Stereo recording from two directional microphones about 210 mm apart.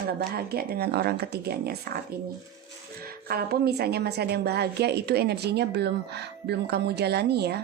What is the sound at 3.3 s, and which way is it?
A woman's voice, 45° right (ahead or behind).